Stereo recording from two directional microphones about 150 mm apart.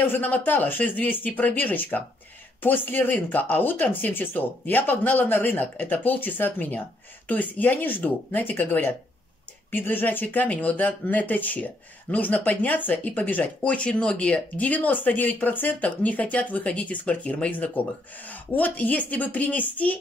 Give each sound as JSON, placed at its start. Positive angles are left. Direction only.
{"t": 0.0, "sound": "speech", "side_deg": 10}